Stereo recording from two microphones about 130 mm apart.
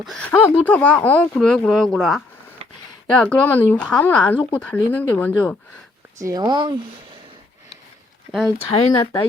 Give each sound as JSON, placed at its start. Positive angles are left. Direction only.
{"t": 0.0, "sound": "speech", "side_deg": 0}
{"t": 0.3, "sound": "speech", "side_deg": 15}
{"t": 6.1, "sound": "speech", "side_deg": -25}
{"t": 8.3, "sound": "speech", "side_deg": 0}
{"t": 8.9, "sound": "speech", "side_deg": 30}